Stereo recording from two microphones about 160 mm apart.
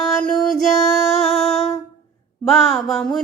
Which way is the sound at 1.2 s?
Centre (ahead or behind).